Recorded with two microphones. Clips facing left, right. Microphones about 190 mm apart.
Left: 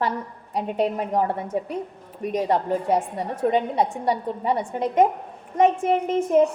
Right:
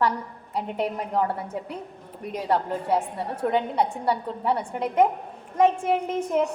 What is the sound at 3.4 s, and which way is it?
A woman's voice, 20° left (ahead or behind).